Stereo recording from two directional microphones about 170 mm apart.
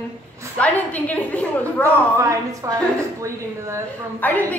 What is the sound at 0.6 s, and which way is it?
A woman's voice, 10° left (ahead or behind).